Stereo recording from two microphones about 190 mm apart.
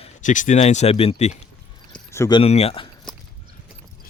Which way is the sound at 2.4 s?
35° left (ahead or behind).